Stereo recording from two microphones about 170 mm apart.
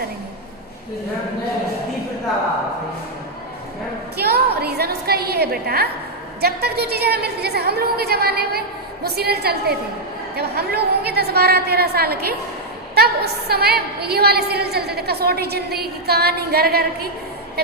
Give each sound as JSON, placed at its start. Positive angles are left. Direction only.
{"t": 4.2, "sound": "a woman's voice", "side_deg": -70}